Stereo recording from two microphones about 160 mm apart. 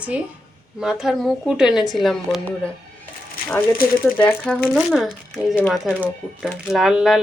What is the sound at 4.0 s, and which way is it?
Speech, 10° left (ahead or behind).